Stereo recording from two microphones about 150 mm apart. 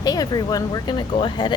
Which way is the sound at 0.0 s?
25° left (ahead or behind).